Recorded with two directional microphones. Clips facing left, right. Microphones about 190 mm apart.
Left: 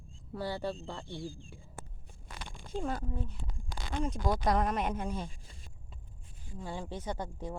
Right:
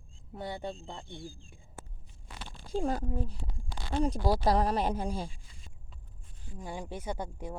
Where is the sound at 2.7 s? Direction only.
35° right (ahead or behind).